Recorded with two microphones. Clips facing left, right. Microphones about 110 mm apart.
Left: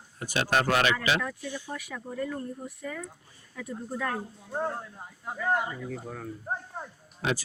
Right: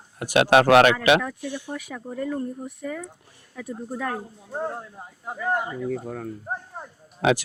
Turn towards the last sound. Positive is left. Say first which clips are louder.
# right 9 dB
turn(degrees=-80)